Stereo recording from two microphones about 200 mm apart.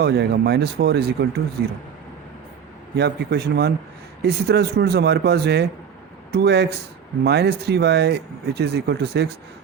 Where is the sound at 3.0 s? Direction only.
55° right (ahead or behind).